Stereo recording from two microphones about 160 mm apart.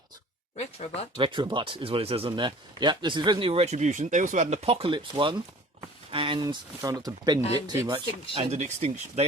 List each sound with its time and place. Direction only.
0.5 s speech: 45° left (ahead or behind)
1.1 s speech: 30° right (ahead or behind)
8.4 s speech: 45° right (ahead or behind)